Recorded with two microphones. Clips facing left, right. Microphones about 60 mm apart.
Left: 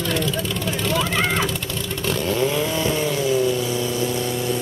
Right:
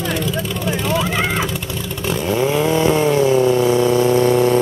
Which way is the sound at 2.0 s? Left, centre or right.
Centre.